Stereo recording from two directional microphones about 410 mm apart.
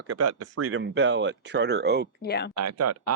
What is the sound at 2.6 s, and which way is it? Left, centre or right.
Speech, right.